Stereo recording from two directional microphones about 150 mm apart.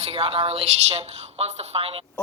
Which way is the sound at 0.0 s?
40° right (ahead or behind).